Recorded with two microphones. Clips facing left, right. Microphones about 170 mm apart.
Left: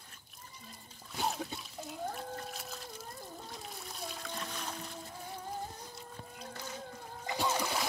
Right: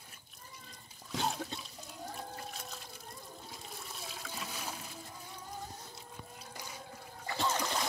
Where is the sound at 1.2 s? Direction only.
5° left (ahead or behind).